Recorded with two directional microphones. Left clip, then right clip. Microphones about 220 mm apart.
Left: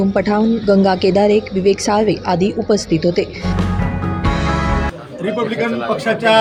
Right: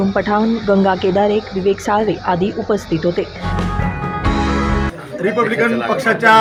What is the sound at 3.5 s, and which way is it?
Music, centre (ahead or behind).